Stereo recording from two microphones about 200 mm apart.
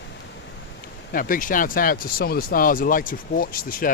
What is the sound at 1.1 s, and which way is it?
Speech, 45° left (ahead or behind).